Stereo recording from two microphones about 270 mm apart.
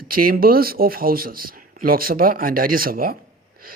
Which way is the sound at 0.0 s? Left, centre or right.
Right.